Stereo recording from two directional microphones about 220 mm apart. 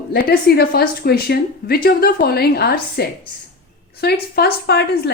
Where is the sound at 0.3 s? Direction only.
45° left (ahead or behind).